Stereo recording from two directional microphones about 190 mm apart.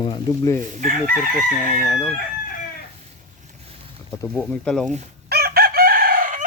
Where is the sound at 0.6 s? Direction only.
45° right (ahead or behind).